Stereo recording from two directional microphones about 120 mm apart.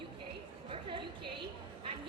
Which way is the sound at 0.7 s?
45° right (ahead or behind).